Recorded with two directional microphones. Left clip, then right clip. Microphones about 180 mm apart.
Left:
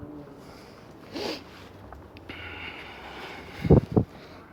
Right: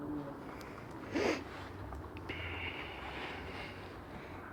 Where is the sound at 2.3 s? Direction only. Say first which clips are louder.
Left 4 dB; 40° left (ahead or behind).